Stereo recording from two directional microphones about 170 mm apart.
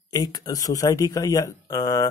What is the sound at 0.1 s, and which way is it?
Speech, 20° left (ahead or behind).